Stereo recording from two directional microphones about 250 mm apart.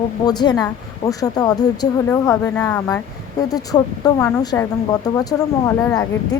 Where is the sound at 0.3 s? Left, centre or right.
Centre.